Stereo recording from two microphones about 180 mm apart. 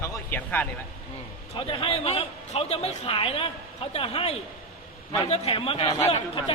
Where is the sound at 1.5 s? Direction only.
30° left (ahead or behind).